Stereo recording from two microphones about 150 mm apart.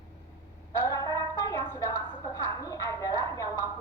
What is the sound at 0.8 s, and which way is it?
A woman's voice, 20° left (ahead or behind).